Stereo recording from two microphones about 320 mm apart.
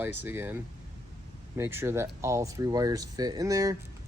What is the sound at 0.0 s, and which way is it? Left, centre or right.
Speech, centre.